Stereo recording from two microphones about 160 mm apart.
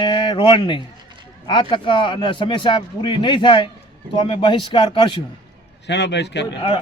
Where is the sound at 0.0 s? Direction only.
30° left (ahead or behind).